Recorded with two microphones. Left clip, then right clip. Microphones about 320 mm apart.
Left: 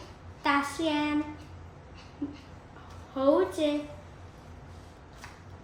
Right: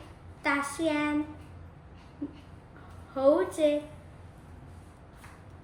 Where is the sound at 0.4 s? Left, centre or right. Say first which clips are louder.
Left 1 dB; centre.